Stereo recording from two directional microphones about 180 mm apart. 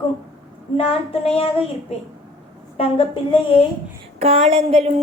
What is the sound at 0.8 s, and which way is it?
Child singing, 35° left (ahead or behind).